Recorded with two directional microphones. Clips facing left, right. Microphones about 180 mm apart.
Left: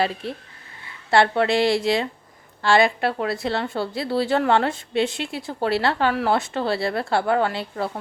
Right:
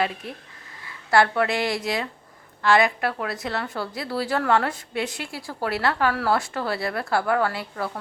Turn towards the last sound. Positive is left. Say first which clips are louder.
# left 2 dB
turn(degrees=25)  # may be behind; listen again after turning